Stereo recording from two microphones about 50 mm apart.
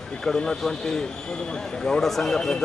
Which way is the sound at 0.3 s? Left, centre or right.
Centre.